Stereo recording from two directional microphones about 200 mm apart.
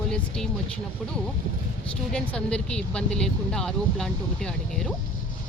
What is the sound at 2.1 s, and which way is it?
Speech, 5° left (ahead or behind).